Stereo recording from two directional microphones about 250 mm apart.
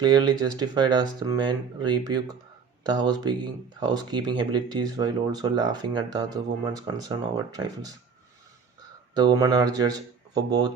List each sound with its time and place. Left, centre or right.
0.0 s speech: centre
9.1 s speech: centre